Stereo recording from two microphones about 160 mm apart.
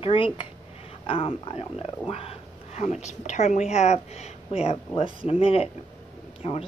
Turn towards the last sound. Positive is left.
turn(degrees=35)  # may be behind; listen again after turning